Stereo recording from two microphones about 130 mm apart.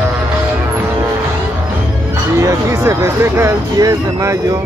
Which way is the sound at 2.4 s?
25° right (ahead or behind).